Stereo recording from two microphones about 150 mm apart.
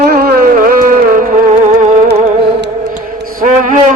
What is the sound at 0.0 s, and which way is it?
Music, 90° right.